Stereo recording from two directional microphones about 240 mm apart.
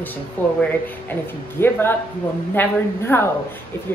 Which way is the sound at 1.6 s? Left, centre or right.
Centre.